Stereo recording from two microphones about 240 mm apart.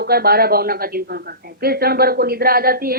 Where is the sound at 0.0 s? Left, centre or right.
Right.